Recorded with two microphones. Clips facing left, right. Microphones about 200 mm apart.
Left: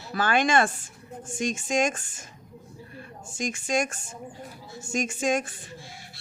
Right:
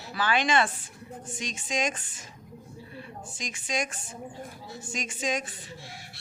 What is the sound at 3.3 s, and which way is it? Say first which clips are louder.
Speech: left 6 dB; 45° left (ahead or behind).